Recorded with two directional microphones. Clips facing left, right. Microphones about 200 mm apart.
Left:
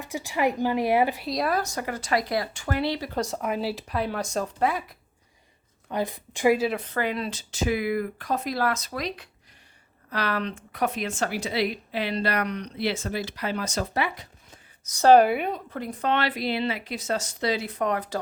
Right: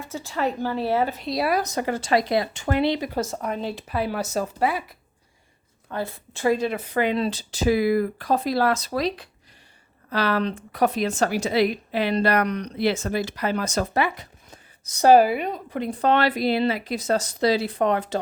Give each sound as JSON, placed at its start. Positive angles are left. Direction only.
{"t": 0.0, "sound": "a woman's voice", "side_deg": 15}
{"t": 1.3, "sound": "speech", "side_deg": -5}
{"t": 1.6, "sound": "speech", "side_deg": -25}
{"t": 3.1, "sound": "speech", "side_deg": 0}
{"t": 5.9, "sound": "a woman's voice", "side_deg": 15}
{"t": 6.7, "sound": "speech", "side_deg": -10}
{"t": 7.0, "sound": "speech", "side_deg": -25}
{"t": 15.0, "sound": "speech", "side_deg": -5}
{"t": 15.9, "sound": "speech", "side_deg": -35}